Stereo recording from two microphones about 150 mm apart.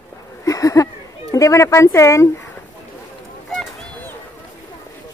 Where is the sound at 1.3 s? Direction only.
20° left (ahead or behind).